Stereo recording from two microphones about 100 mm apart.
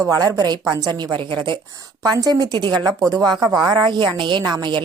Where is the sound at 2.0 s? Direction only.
40° right (ahead or behind).